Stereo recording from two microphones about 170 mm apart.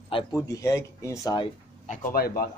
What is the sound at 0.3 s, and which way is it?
Speech, 20° left (ahead or behind).